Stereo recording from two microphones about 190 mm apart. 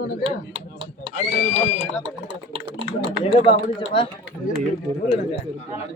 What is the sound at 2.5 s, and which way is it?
Typing, 25° right (ahead or behind).